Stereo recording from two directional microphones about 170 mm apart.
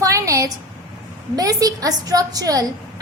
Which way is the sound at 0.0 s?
20° right (ahead or behind).